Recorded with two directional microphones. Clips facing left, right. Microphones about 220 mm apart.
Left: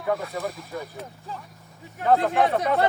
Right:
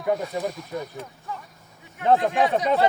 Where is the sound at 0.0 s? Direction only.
20° right (ahead or behind).